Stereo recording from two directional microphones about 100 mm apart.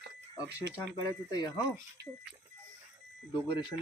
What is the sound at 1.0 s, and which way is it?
Speech, 40° left (ahead or behind).